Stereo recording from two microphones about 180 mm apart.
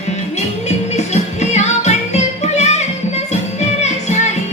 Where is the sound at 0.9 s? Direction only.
40° left (ahead or behind).